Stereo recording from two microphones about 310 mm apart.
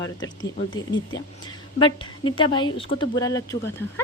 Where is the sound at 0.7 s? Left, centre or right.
Centre.